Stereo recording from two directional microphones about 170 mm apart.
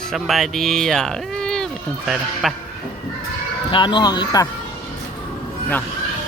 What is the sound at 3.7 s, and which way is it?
Speech, 25° left (ahead or behind).